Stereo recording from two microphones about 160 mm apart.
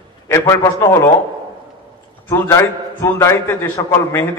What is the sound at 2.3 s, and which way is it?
A man's voice, 20° left (ahead or behind).